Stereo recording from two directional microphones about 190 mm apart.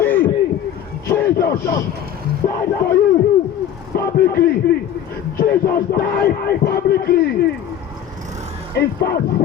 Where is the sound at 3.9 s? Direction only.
55° left (ahead or behind).